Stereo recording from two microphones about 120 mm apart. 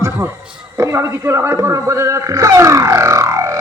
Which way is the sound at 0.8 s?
25° right (ahead or behind).